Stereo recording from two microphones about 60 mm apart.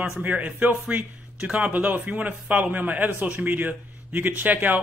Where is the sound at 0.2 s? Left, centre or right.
Right.